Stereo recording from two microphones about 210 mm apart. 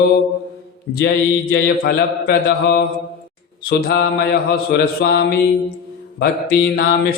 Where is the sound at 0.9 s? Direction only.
50° left (ahead or behind).